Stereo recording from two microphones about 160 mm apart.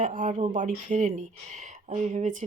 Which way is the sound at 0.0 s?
55° right (ahead or behind).